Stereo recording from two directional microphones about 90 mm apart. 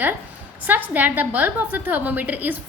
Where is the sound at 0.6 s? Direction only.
20° right (ahead or behind).